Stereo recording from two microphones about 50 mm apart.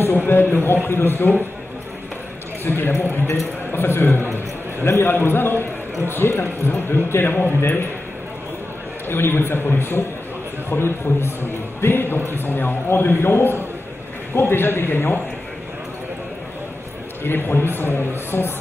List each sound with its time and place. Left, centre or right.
0.3 s a sound: left
0.8 s a man's voice: left
2.6 s a man's voice: left
9.1 s a man's voice: left
17.2 s a man's voice: left